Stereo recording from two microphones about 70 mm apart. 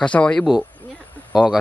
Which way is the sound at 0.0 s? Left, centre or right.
Centre.